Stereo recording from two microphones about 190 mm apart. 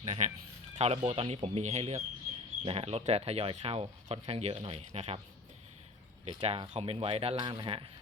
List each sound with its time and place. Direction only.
0.0 s a sound: 35° right (ahead or behind)
0.8 s speech: 35° right (ahead or behind)
6.2 s speech: 30° right (ahead or behind)